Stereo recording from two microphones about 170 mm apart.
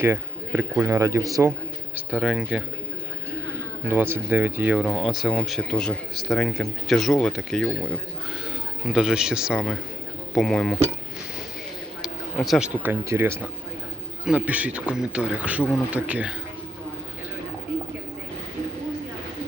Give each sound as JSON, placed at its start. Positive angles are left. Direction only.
{"t": 0.0, "sound": "a man's voice", "side_deg": -15}
{"t": 2.2, "sound": "speech", "side_deg": -5}
{"t": 3.8, "sound": "speech", "side_deg": -15}
{"t": 8.9, "sound": "speech", "side_deg": -5}
{"t": 12.0, "sound": "a man's voice", "side_deg": 0}